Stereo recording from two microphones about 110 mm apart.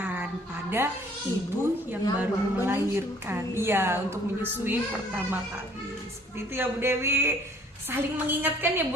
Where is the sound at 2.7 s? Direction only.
20° right (ahead or behind).